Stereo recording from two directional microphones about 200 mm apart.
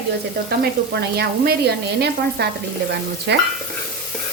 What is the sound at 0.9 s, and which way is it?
Frying, 55° right (ahead or behind).